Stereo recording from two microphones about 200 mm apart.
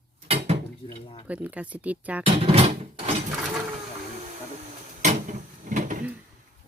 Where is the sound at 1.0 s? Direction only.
25° left (ahead or behind).